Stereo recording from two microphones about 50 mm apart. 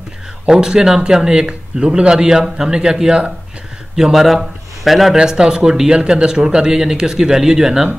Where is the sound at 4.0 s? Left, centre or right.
Centre.